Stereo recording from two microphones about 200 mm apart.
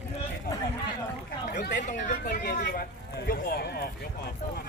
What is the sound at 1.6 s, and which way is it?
Speech, 40° left (ahead or behind).